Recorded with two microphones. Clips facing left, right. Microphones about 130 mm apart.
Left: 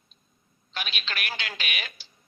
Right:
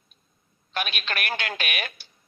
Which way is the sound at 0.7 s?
55° right (ahead or behind).